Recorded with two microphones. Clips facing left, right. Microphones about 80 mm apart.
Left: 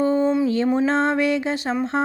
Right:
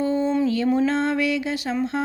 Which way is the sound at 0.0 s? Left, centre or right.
Left.